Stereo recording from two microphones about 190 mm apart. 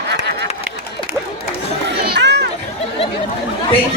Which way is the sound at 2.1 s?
60° right (ahead or behind).